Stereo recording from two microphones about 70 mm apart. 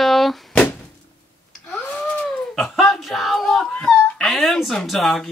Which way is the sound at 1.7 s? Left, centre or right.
Centre.